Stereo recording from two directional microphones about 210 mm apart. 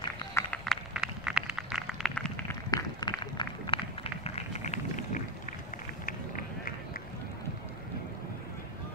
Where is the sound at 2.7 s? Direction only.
20° left (ahead or behind); by 7.0 s 40° left (ahead or behind).